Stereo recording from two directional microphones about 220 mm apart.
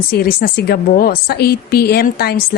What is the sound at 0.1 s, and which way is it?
Speech, 45° left (ahead or behind).